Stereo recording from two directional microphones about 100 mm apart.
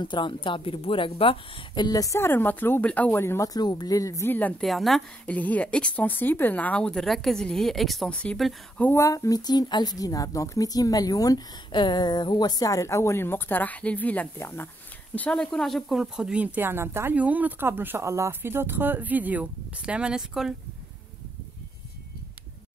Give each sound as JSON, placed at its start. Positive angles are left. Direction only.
{"t": 0.0, "sound": "a woman's voice", "side_deg": 50}
{"t": 1.9, "sound": "a woman's voice", "side_deg": 35}
{"t": 2.1, "sound": "speech", "side_deg": 20}
{"t": 3.4, "sound": "a woman's voice", "side_deg": 45}
{"t": 4.3, "sound": "speech", "side_deg": 15}
{"t": 4.6, "sound": "a woman's voice", "side_deg": 0}
{"t": 5.2, "sound": "speech", "side_deg": 15}
{"t": 8.9, "sound": "a woman's voice", "side_deg": 30}
{"t": 15.1, "sound": "speech", "side_deg": 10}